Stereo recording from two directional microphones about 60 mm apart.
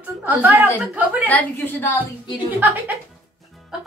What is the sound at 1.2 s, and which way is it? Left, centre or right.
Speech, left.